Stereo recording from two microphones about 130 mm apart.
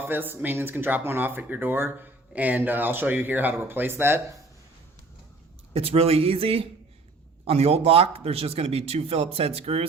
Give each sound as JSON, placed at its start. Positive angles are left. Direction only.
{"t": 0.0, "sound": "speech", "side_deg": -15}
{"t": 5.7, "sound": "speech", "side_deg": -50}